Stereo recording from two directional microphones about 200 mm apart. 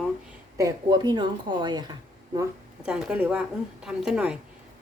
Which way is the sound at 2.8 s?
5° right (ahead or behind).